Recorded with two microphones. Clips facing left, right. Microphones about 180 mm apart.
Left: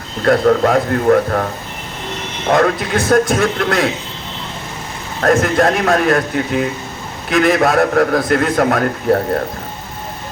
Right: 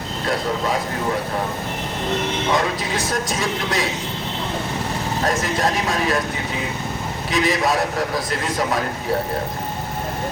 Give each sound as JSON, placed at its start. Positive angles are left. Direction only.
{"t": 0.3, "sound": "a man's voice", "side_deg": 60}
{"t": 2.5, "sound": "a man's voice", "side_deg": 55}
{"t": 5.2, "sound": "a man's voice", "side_deg": 55}